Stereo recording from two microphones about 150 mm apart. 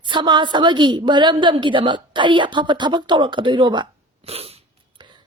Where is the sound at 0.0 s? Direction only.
30° right (ahead or behind).